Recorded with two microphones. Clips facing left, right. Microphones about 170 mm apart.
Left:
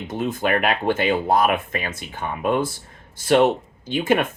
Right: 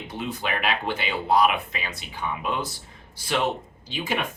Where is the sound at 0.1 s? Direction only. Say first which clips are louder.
Left 8 dB; 50° left (ahead or behind).